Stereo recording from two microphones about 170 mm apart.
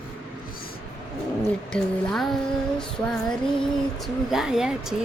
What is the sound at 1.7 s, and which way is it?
Music, centre (ahead or behind).